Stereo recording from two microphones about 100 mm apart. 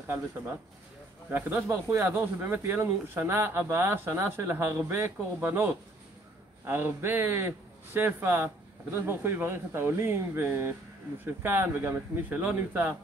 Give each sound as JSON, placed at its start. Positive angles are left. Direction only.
{"t": 1.3, "sound": "speech", "side_deg": -15}
{"t": 1.9, "sound": "speech", "side_deg": -25}